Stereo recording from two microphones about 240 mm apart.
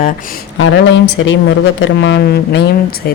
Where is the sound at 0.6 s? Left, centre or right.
Left.